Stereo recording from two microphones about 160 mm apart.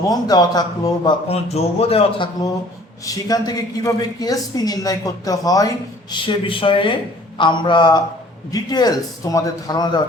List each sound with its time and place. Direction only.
0.1 s a woman's voice: 25° left (ahead or behind)
1.0 s a man's voice: 40° left (ahead or behind)